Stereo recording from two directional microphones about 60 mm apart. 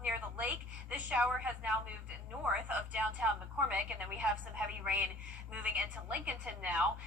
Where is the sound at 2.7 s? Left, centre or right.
Right.